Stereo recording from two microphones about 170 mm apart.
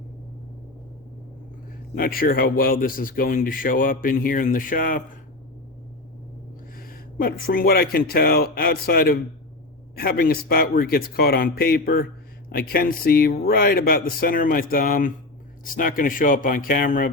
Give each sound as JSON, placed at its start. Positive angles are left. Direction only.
{"t": 2.0, "sound": "speech", "side_deg": 60}
{"t": 6.7, "sound": "speech", "side_deg": 60}